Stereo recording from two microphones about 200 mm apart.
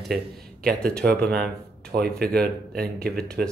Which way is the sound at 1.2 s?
50° right (ahead or behind).